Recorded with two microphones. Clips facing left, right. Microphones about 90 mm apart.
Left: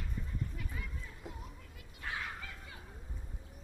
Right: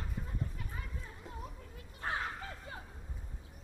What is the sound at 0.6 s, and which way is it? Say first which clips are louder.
Children playing: even; 35° right (ahead or behind).